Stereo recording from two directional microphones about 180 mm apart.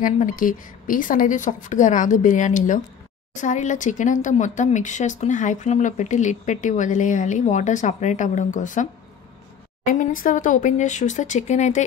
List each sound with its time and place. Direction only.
0.0 s speech: 45° left (ahead or behind)
9.8 s speech: 50° left (ahead or behind)